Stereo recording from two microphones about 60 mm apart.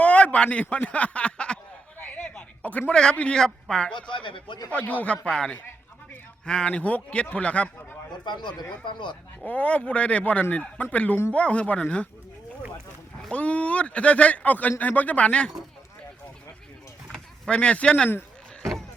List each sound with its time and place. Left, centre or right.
0.0 s a sound: left
0.6 s speech: left
2.6 s speech: left
2.9 s speech: centre
9.5 s speech: left
13.3 s speech: left
17.1 s a sound: centre
17.6 s speech: centre